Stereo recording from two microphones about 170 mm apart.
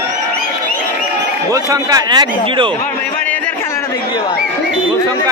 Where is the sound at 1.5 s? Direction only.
20° right (ahead or behind).